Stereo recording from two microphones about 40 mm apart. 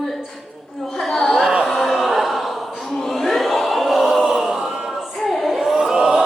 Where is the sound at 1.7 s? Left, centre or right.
Centre.